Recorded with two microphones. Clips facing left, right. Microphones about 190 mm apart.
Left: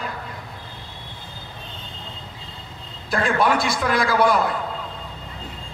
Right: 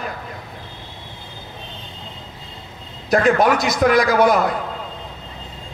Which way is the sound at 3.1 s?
40° right (ahead or behind).